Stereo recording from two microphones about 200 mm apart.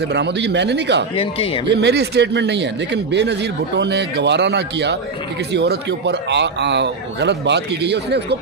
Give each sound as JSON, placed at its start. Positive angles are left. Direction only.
{"t": 0.0, "sound": "a man's voice", "side_deg": -55}
{"t": 1.1, "sound": "speech", "side_deg": 30}
{"t": 1.7, "sound": "a man's voice", "side_deg": -55}